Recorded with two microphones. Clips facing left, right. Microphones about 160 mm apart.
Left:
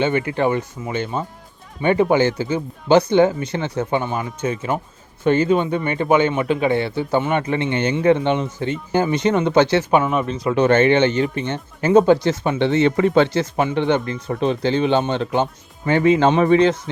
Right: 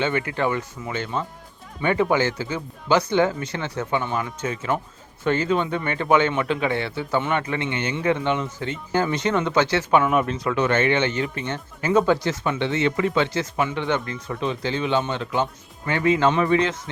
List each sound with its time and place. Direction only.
0.0 s speech: 25° left (ahead or behind)
10.1 s speech: 5° right (ahead or behind)
10.3 s speech: 30° left (ahead or behind)